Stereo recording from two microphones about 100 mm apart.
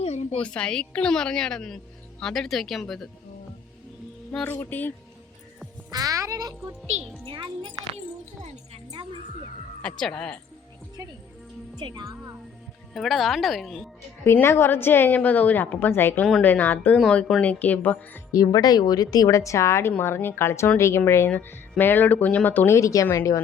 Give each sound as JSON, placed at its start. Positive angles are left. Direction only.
{"t": 0.0, "sound": "a sound", "side_deg": 90}
{"t": 0.4, "sound": "a woman's voice", "side_deg": 10}
{"t": 4.4, "sound": "a woman's voice", "side_deg": 20}
{"t": 5.9, "sound": "speech", "side_deg": -35}
{"t": 9.8, "sound": "a woman's voice", "side_deg": 5}
{"t": 11.8, "sound": "speech", "side_deg": -50}
{"t": 12.9, "sound": "speech", "side_deg": 0}
{"t": 14.3, "sound": "a woman's voice", "side_deg": 25}
{"t": 17.0, "sound": "a woman's voice", "side_deg": 5}
{"t": 18.3, "sound": "a woman's voice", "side_deg": 40}